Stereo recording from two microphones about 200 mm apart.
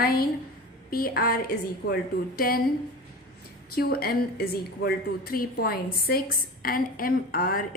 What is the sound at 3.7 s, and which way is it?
A woman's voice, 50° left (ahead or behind).